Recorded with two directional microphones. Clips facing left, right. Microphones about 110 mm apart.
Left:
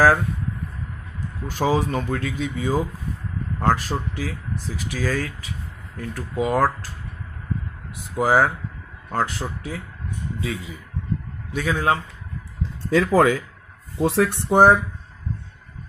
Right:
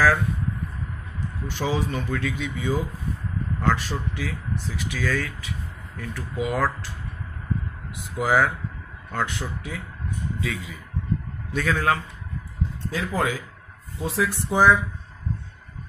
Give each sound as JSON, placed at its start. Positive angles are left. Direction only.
{"t": 1.5, "sound": "speech", "side_deg": 40}
{"t": 8.2, "sound": "speech", "side_deg": 40}
{"t": 11.5, "sound": "a man's voice", "side_deg": 15}
{"t": 12.9, "sound": "speech", "side_deg": 75}